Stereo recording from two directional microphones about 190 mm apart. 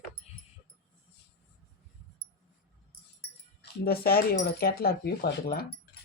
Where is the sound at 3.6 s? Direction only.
55° left (ahead or behind).